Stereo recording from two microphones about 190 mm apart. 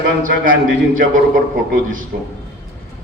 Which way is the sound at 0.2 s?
45° right (ahead or behind).